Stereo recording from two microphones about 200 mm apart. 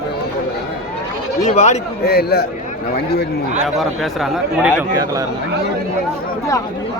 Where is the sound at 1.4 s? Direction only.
35° left (ahead or behind).